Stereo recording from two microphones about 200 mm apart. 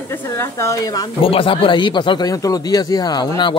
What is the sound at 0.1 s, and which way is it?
Speech, 10° left (ahead or behind).